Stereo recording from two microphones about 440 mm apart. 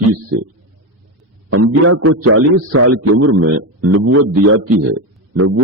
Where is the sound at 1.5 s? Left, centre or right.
Right.